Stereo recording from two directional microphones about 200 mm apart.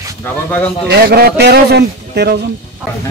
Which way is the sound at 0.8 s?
55° right (ahead or behind).